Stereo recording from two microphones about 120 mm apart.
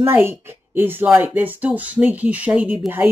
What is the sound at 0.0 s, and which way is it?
A woman's voice, 20° right (ahead or behind).